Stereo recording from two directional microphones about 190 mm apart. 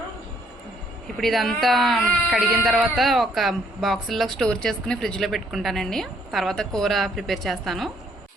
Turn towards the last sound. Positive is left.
turn(degrees=0)  # may be behind; listen again after turning